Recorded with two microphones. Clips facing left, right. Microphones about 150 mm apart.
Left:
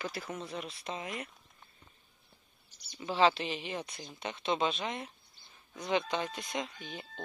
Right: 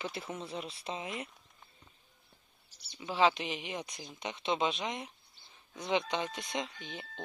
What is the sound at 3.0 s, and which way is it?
Speech, 10° right (ahead or behind).